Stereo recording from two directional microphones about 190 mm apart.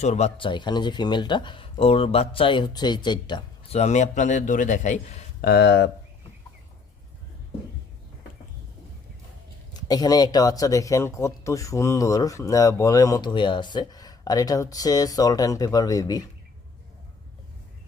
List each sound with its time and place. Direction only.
0.0 s speech: 35° left (ahead or behind); by 5.9 s 65° left (ahead or behind)
9.7 s speech: 20° left (ahead or behind)